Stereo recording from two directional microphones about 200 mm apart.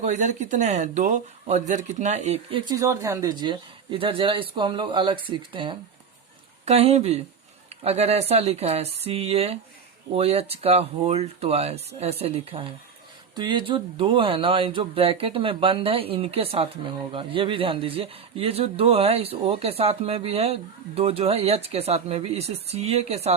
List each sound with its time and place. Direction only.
0.0 s speech: 35° right (ahead or behind)